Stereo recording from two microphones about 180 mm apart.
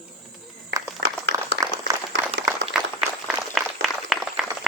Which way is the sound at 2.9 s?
Centre (ahead or behind).